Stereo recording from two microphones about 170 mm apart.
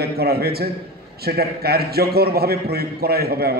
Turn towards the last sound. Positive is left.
turn(degrees=-65)  # may be behind; listen again after turning